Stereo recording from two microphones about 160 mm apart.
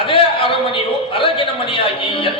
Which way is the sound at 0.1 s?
35° left (ahead or behind).